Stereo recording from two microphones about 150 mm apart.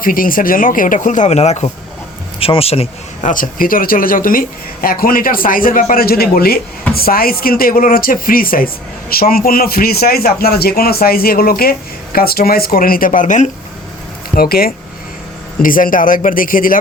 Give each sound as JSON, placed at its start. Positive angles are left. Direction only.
{"t": 0.0, "sound": "speech", "side_deg": 70}
{"t": 3.2, "sound": "speech", "side_deg": 65}
{"t": 14.3, "sound": "speech", "side_deg": 80}
{"t": 15.6, "sound": "speech", "side_deg": 65}